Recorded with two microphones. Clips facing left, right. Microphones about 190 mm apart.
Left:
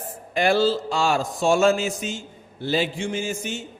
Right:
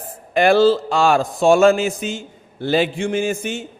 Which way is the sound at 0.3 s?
60° right (ahead or behind).